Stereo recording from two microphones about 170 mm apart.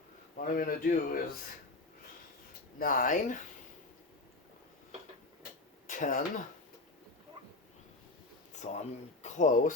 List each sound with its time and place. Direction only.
0.3 s speech: 55° left (ahead or behind)
2.7 s speech: 55° left (ahead or behind)
5.9 s speech: 50° left (ahead or behind)
8.6 s speech: 40° left (ahead or behind)